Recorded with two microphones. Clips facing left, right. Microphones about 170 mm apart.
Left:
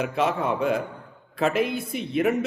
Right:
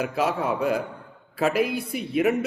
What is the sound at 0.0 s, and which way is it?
A man's voice, 5° right (ahead or behind).